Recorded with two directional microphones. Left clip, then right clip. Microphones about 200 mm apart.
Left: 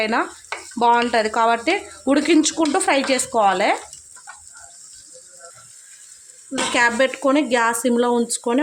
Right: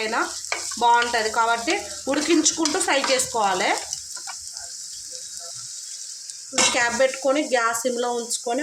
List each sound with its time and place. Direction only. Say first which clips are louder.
0.0 s speech: left 3 dB; 45° left (ahead or behind)
6.7 s speech: left 3 dB; 55° left (ahead or behind)